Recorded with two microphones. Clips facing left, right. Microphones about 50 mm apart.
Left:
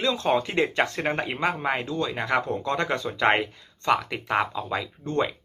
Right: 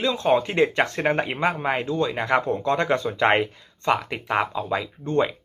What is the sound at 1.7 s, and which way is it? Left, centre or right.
Speech, right.